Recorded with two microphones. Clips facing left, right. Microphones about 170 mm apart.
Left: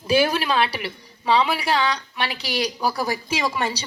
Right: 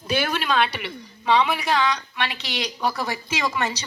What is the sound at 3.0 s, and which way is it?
Speech, 35° left (ahead or behind).